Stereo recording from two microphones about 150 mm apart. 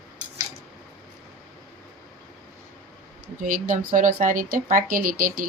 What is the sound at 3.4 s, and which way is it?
Speech, 60° right (ahead or behind).